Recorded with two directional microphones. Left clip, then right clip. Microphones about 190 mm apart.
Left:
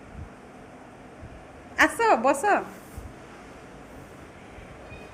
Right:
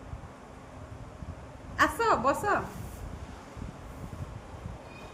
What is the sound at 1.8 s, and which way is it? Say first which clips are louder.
Speech: left 5 dB; 15° left (ahead or behind).